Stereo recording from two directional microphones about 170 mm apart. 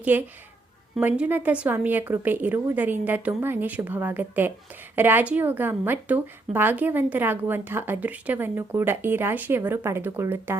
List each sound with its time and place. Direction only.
0.0 s a woman's voice: 10° right (ahead or behind)